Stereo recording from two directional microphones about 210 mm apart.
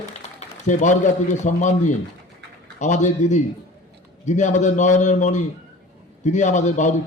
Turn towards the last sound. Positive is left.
turn(degrees=35)  # may be behind; listen again after turning